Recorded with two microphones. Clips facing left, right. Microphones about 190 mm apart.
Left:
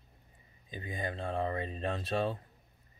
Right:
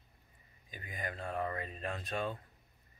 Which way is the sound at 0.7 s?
25° left (ahead or behind).